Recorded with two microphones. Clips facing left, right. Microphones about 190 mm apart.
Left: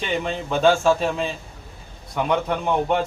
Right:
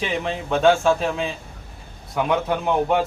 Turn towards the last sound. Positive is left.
turn(degrees=-5)  # may be behind; listen again after turning